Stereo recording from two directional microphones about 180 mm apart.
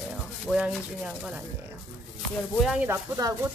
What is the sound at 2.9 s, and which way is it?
Speech, 20° right (ahead or behind).